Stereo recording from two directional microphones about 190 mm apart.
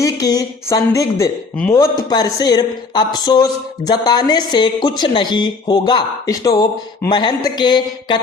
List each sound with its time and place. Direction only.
0.0 s speech: 20° left (ahead or behind)